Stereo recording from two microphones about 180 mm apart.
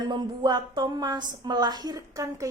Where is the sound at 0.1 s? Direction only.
25° right (ahead or behind).